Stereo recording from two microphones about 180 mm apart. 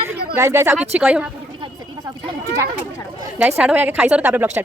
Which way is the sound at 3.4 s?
5° right (ahead or behind).